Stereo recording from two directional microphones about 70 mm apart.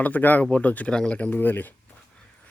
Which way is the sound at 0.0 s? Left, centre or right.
Left.